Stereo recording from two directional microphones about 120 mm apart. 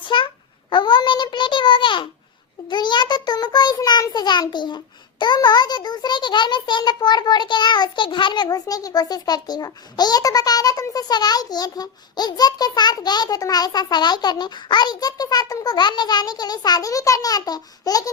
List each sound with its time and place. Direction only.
0.0 s babbling: 45° left (ahead or behind)
2.6 s child singing: 40° left (ahead or behind)
5.2 s a child's voice: 35° left (ahead or behind)